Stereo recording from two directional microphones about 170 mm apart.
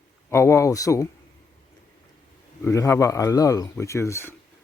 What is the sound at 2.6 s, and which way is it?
Speech, 15° left (ahead or behind).